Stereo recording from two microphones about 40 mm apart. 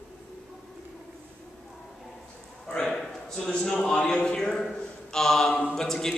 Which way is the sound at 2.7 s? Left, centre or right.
Centre.